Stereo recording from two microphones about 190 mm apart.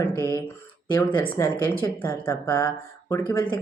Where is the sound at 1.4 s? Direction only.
10° left (ahead or behind).